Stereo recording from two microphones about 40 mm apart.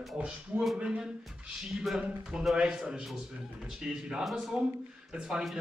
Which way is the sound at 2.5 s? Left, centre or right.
Right.